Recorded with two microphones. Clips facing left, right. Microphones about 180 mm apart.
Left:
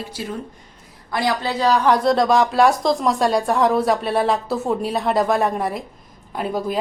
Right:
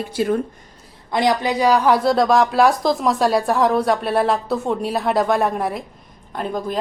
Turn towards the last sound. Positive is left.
turn(degrees=5)  # may be behind; listen again after turning